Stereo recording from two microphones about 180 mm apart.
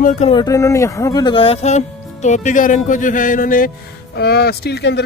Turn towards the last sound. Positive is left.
turn(degrees=70)  # may be behind; listen again after turning